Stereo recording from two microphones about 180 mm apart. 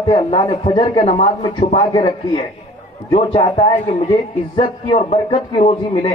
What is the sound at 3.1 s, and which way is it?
A man's voice, 30° left (ahead or behind).